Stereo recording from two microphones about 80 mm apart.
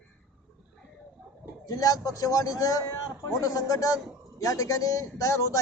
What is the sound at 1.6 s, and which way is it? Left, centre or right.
A man's voice, left.